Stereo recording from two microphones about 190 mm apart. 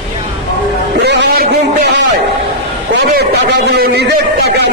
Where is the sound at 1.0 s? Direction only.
65° right (ahead or behind).